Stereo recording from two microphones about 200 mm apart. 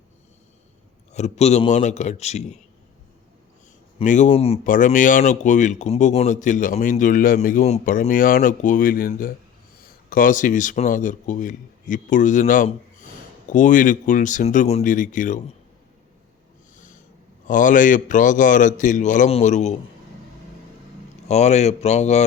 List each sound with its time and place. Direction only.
1.1 s speech: 35° left (ahead or behind)
3.9 s speech: 40° left (ahead or behind)
16.7 s snort: 40° left (ahead or behind)
17.4 s speech: 40° left (ahead or behind)
21.2 s speech: 35° left (ahead or behind)